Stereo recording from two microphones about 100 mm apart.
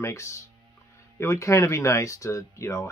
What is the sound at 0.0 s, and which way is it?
Speech, 30° left (ahead or behind).